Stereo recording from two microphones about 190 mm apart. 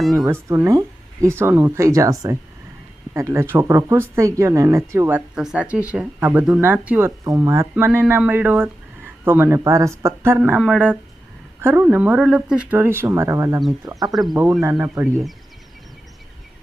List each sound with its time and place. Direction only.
0.1 s speech: 15° right (ahead or behind)
14.1 s speech: centre (ahead or behind)